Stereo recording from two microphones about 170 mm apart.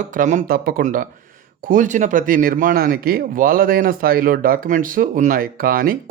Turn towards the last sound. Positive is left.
turn(degrees=-60)  # may be behind; listen again after turning